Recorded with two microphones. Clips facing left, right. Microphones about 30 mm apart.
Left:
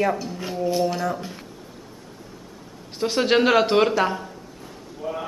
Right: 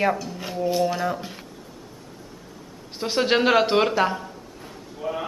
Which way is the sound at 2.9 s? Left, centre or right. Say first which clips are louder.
Left 2 dB; centre.